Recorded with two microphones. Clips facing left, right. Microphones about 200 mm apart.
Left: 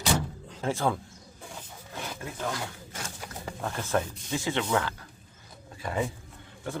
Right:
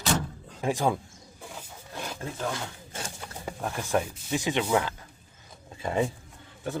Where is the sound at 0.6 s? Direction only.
15° right (ahead or behind).